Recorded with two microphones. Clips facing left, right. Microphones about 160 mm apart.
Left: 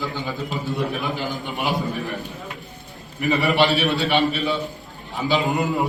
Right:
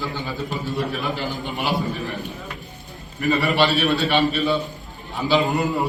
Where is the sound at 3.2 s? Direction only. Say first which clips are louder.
Even; 20° left (ahead or behind).